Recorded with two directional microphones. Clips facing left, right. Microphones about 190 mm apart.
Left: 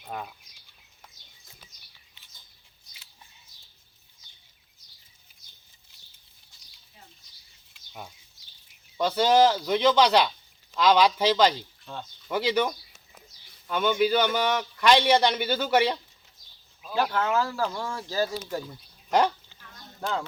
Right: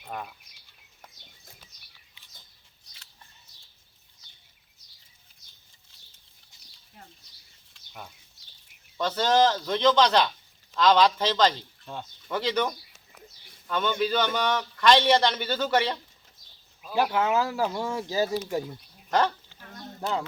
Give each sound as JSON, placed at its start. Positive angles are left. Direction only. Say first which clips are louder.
{"t": 0.0, "sound": "speech", "louder": "left 1 dB", "side_deg": 0}
{"t": 6.5, "sound": "a sound", "louder": "right 3 dB", "side_deg": -20}
{"t": 7.7, "sound": "a sound", "louder": "left 2 dB", "side_deg": 5}
{"t": 9.0, "sound": "a man's voice", "louder": "left 2 dB", "side_deg": 10}
{"t": 16.9, "sound": "speech", "louder": "right 1 dB", "side_deg": -10}
{"t": 20.0, "sound": "speech", "louder": "right 1 dB", "side_deg": -15}